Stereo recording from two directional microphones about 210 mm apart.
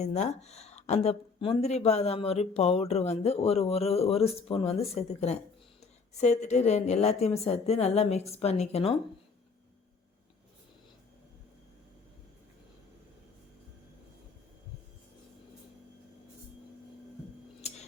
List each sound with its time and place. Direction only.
0.0 s a woman's voice: 30° left (ahead or behind)